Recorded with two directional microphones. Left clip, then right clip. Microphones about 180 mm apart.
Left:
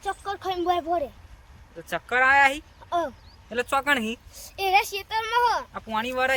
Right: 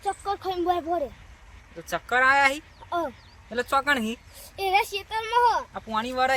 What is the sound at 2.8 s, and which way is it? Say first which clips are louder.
Speech: left 2 dB; 10° right (ahead or behind).